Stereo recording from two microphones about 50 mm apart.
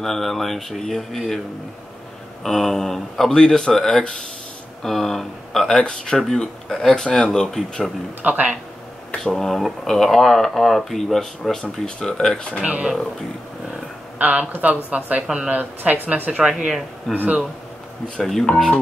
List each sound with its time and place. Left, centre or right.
0.0 s speech: centre
2.4 s speech: centre
8.2 s speech: right
9.3 s speech: centre
12.6 s speech: right
14.1 s speech: right
16.4 s speech: centre
17.1 s speech: centre